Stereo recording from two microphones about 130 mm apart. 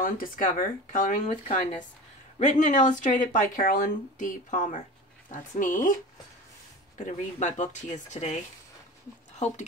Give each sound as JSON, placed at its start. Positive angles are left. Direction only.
{"t": 0.0, "sound": "speech", "side_deg": 90}
{"t": 1.5, "sound": "speech", "side_deg": 65}
{"t": 5.3, "sound": "speech", "side_deg": 85}
{"t": 7.0, "sound": "speech", "side_deg": 70}